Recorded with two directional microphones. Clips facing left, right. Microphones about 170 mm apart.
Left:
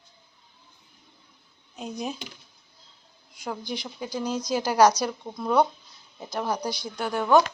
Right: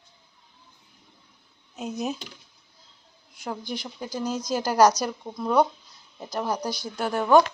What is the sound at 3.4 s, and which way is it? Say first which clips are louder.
Speech: even; 5° right (ahead or behind).